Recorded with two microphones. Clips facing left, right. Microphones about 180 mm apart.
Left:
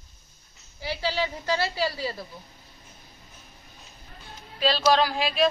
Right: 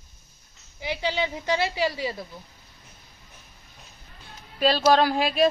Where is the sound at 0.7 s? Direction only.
20° right (ahead or behind).